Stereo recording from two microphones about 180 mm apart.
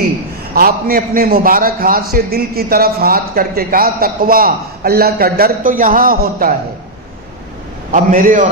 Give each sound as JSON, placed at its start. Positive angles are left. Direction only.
{"t": 0.6, "sound": "a man's voice", "side_deg": -55}
{"t": 7.9, "sound": "a man's voice", "side_deg": -50}